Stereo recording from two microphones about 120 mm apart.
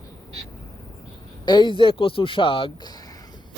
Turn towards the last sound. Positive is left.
turn(degrees=35)  # may be behind; listen again after turning